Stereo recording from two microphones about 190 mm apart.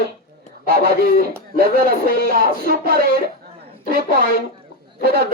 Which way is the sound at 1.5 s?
50° right (ahead or behind).